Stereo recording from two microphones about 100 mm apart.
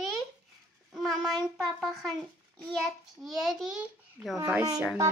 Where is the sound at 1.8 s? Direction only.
Centre (ahead or behind).